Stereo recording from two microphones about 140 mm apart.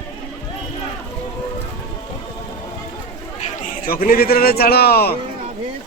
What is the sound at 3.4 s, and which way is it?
Chatter, 55° left (ahead or behind).